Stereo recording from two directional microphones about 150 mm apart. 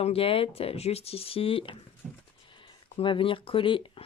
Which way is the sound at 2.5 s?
35° left (ahead or behind).